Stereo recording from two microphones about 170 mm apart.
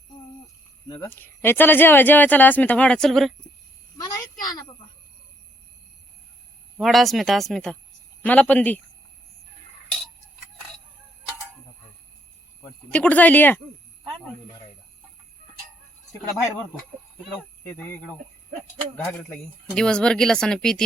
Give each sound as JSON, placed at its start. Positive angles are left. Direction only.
{"t": 1.0, "sound": "speech", "side_deg": 15}
{"t": 3.9, "sound": "a sound", "side_deg": 20}
{"t": 6.7, "sound": "speech", "side_deg": 0}
{"t": 12.9, "sound": "speech", "side_deg": 10}
{"t": 17.7, "sound": "speech", "side_deg": 15}
{"t": 19.7, "sound": "speech", "side_deg": 5}